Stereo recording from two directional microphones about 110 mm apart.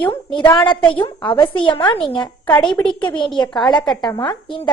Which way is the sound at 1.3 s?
50° left (ahead or behind).